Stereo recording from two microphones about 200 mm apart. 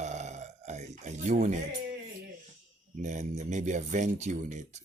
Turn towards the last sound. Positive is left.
turn(degrees=-35)  # may be behind; listen again after turning